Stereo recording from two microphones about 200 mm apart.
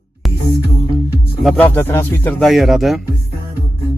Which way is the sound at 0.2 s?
Centre (ahead or behind).